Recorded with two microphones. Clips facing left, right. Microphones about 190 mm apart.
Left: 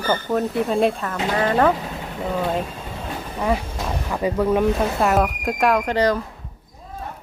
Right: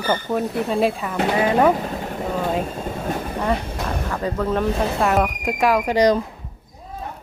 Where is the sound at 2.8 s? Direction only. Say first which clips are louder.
Right 6 dB; 45° right (ahead or behind).